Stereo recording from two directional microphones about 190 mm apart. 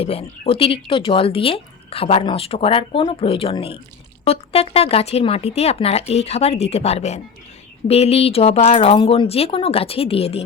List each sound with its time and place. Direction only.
0.0 s speech: 30° left (ahead or behind)